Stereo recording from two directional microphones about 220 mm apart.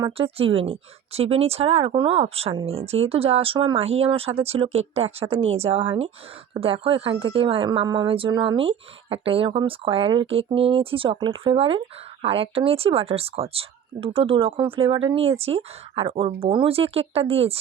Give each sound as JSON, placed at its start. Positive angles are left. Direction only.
{"t": 0.0, "sound": "speech", "side_deg": -25}